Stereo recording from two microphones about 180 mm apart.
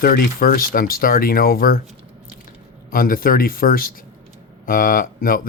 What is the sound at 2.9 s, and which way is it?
Speech, 50° left (ahead or behind).